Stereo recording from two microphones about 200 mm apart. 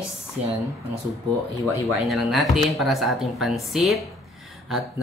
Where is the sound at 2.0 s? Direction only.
Centre (ahead or behind).